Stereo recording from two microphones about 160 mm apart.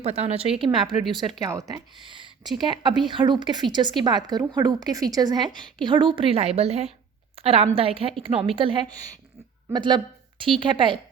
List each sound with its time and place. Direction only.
0.0 s a woman's voice: 40° right (ahead or behind)
1.5 s a woman's voice: 20° right (ahead or behind)